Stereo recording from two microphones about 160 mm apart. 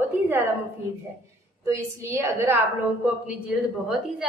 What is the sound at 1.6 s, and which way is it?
Speech, 20° right (ahead or behind).